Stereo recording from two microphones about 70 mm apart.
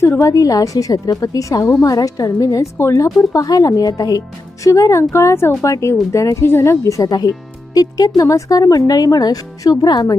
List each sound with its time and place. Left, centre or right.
0.2 s a woman's voice: left
2.7 s speech: left
3.4 s a woman's voice: left
4.6 s speech: left
6.3 s a woman's voice: left